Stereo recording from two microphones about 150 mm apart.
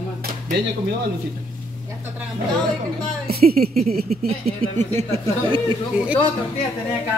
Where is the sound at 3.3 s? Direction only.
90° right.